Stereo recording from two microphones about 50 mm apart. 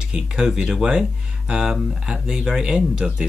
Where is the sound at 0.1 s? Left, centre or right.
Centre.